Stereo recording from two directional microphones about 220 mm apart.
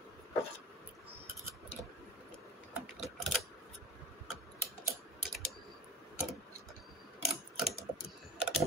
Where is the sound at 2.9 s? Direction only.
Centre (ahead or behind).